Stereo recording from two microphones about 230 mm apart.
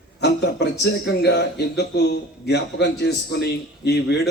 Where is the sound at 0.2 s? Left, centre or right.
Left.